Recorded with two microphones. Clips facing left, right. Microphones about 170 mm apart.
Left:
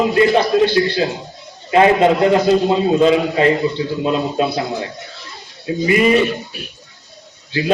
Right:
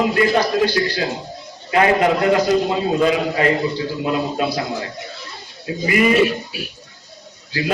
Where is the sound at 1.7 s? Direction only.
25° left (ahead or behind).